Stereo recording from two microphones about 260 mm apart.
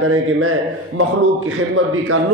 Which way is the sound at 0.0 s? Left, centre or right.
Right.